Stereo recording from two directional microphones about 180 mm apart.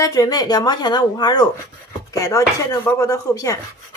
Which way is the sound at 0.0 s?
20° left (ahead or behind).